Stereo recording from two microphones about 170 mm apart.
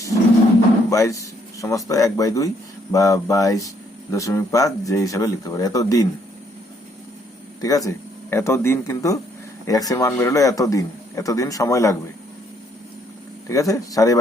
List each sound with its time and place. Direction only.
0.9 s a man's voice: 20° left (ahead or behind)
7.6 s a man's voice: 20° left (ahead or behind)
13.5 s a man's voice: 20° left (ahead or behind)